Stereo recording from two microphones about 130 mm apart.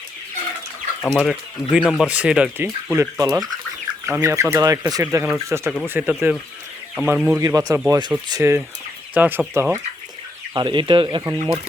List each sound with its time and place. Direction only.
1.0 s speech: 10° left (ahead or behind)
1.7 s speech: centre (ahead or behind)
2.9 s speech: 25° right (ahead or behind)
5.9 s speech: 10° right (ahead or behind)
7.4 s speech: 25° right (ahead or behind)
10.5 s speech: 35° right (ahead or behind)